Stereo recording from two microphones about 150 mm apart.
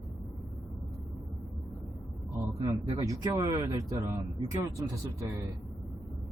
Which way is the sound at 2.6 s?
20° right (ahead or behind).